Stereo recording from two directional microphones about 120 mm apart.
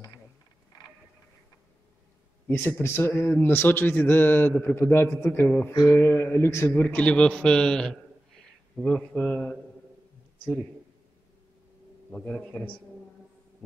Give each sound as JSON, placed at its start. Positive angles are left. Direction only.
{"t": 2.4, "sound": "a man's voice", "side_deg": 20}
{"t": 12.1, "sound": "a man's voice", "side_deg": 10}